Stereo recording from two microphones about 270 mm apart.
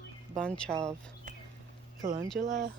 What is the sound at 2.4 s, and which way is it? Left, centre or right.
Speech, right.